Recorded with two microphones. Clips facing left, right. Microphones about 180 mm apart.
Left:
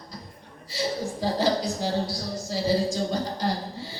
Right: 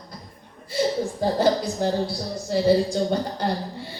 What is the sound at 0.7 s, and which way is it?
A woman's voice, 55° right (ahead or behind).